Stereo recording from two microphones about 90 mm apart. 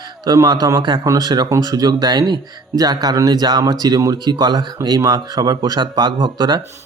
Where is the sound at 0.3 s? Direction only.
45° right (ahead or behind).